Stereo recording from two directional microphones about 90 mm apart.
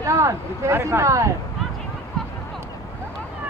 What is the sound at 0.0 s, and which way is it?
Speech, 35° right (ahead or behind).